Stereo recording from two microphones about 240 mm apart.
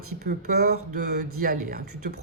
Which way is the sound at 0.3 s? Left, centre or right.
Right.